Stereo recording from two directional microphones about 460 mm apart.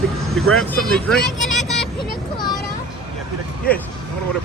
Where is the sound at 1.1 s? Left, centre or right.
Centre.